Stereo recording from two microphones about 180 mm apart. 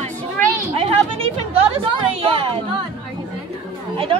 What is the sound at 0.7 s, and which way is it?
A woman's voice, 30° right (ahead or behind).